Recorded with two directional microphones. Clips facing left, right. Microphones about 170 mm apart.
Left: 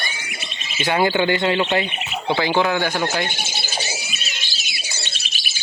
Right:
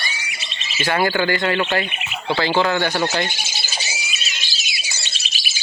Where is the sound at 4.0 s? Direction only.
55° left (ahead or behind).